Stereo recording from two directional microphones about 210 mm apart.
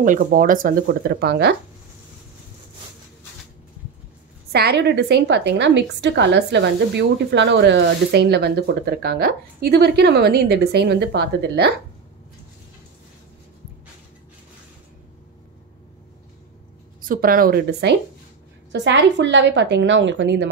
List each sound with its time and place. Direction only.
0.0 s speech: 40° right (ahead or behind)
4.5 s a woman's voice: 50° right (ahead or behind)
17.0 s a woman's voice: 40° right (ahead or behind); by 20.4 s 60° right (ahead or behind)